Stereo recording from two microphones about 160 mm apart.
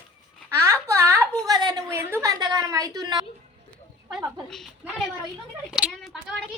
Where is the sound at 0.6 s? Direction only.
20° right (ahead or behind).